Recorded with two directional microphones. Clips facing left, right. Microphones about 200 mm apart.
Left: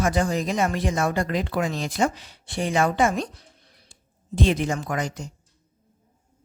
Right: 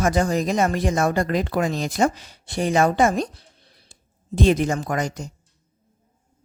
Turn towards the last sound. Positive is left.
turn(degrees=-40)  # may be behind; listen again after turning